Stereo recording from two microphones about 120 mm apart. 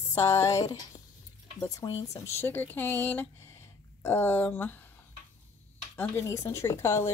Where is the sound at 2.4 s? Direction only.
15° left (ahead or behind).